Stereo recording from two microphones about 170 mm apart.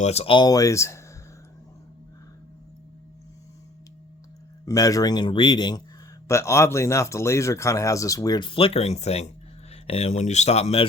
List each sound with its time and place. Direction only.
0.0 s speech: 40° left (ahead or behind); by 1.0 s 15° left (ahead or behind)
4.6 s speech: 20° left (ahead or behind); by 10.8 s 40° left (ahead or behind)